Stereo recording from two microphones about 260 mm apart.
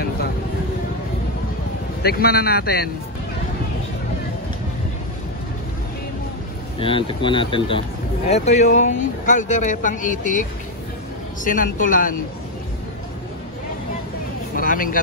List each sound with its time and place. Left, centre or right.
2.0 s a man's voice: left
6.8 s speech: centre
11.4 s a man's voice: left
14.5 s vehicle: left